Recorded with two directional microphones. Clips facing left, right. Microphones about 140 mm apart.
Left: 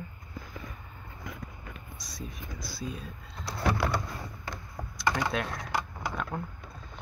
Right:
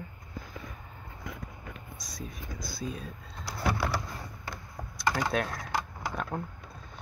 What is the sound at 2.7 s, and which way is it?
Speech, 45° right (ahead or behind).